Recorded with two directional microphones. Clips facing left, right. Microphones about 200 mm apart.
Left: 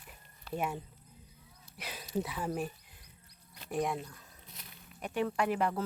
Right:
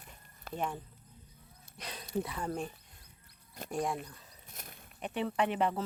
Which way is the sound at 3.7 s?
Centre (ahead or behind).